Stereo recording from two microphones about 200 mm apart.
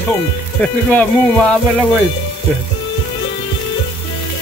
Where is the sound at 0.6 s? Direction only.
5° left (ahead or behind).